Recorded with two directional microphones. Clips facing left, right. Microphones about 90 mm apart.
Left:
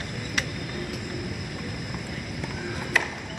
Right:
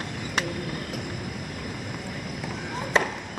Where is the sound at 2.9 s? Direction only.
30° right (ahead or behind).